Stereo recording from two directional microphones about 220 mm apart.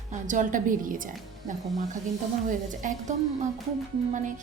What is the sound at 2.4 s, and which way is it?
Speech, 35° right (ahead or behind).